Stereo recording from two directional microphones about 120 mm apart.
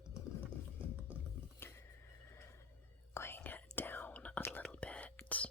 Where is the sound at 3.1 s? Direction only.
20° left (ahead or behind).